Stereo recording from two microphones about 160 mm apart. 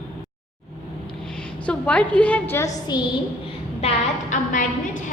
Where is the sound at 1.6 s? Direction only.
5° left (ahead or behind).